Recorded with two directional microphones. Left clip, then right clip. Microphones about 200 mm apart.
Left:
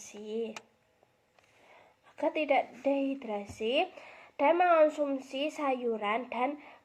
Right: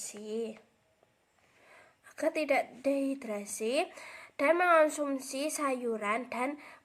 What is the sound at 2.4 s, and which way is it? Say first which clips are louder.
A woman's voice: left 3 dB; 50° right (ahead or behind).